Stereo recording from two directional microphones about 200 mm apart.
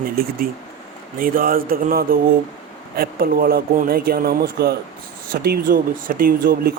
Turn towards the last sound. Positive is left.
turn(degrees=-45)  # may be behind; listen again after turning